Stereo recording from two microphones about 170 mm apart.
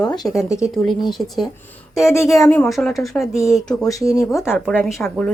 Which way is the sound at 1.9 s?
15° left (ahead or behind).